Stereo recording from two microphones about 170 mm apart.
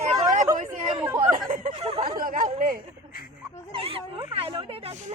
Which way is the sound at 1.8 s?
35° right (ahead or behind).